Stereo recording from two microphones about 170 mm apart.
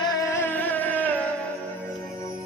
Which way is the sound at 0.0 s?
20° left (ahead or behind).